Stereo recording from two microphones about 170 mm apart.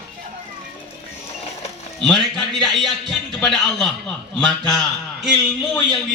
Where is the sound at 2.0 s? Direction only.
Centre (ahead or behind).